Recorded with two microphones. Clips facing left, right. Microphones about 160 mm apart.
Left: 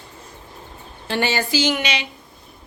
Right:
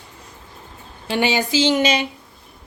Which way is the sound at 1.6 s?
35° right (ahead or behind).